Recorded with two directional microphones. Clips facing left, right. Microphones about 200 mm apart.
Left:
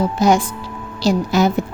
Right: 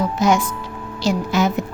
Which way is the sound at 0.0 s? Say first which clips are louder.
Left 2 dB; 35° left (ahead or behind).